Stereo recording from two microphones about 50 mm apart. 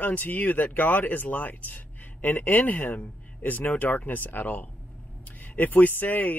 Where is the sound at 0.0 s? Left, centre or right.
Left.